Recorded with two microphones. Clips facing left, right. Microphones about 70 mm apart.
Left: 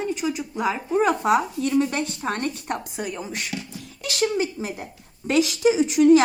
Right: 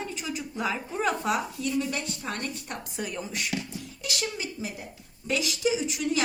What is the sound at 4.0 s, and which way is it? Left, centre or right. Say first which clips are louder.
Speech: left 10 dB; left.